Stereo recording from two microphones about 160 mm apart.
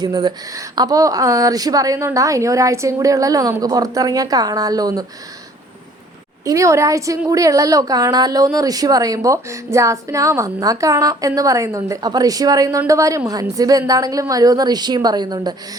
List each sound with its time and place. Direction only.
0.0 s speech: 25° right (ahead or behind)
6.4 s speech: 20° right (ahead or behind)